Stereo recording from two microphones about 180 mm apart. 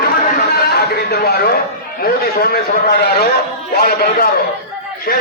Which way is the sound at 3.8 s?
55° left (ahead or behind).